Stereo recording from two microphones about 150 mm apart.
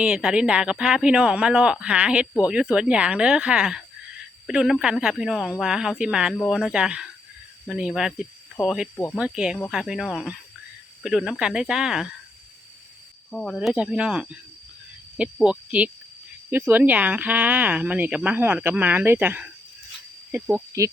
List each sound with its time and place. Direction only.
0.0 s speech: 5° right (ahead or behind)
13.3 s speech: 5° left (ahead or behind); by 20.9 s 15° right (ahead or behind)